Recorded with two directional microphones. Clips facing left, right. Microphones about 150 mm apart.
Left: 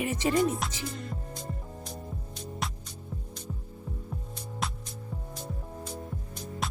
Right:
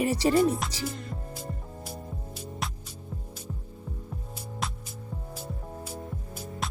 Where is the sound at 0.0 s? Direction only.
35° right (ahead or behind).